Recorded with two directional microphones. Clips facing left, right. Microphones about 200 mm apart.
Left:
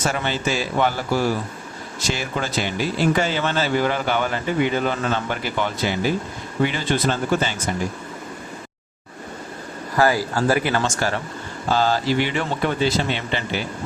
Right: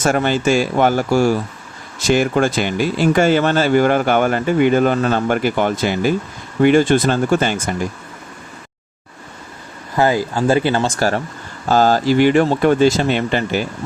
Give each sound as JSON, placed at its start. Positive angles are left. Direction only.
{"t": 0.0, "sound": "speech", "side_deg": -50}
{"t": 9.9, "sound": "speech", "side_deg": -20}